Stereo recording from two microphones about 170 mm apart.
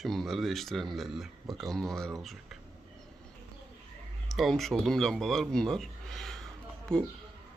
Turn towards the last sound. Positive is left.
turn(degrees=5)  # may be behind; listen again after turning